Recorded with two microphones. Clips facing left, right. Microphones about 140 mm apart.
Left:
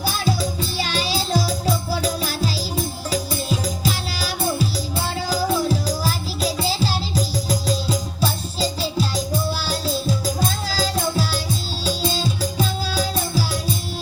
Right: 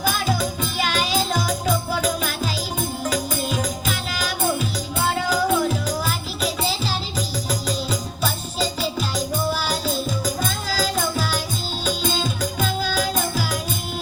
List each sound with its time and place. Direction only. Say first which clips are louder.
0.0 s music: even; 35° left (ahead or behind)
10.8 s music: left 1 dB; 35° left (ahead or behind)